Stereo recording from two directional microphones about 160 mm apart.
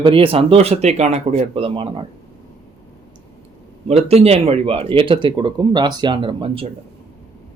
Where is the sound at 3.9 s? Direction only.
40° right (ahead or behind).